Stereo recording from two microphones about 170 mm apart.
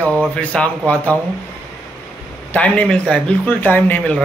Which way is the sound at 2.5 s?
10° left (ahead or behind).